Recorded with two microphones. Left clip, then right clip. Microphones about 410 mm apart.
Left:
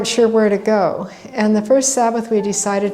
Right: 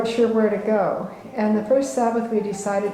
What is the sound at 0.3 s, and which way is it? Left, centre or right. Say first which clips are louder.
A woman's voice: left 5 dB; left.